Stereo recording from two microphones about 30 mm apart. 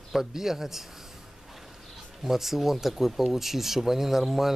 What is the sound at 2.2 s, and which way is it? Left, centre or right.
Speech, centre.